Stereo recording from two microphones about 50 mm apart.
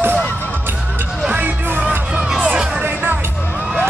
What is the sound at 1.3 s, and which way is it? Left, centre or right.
Music, right.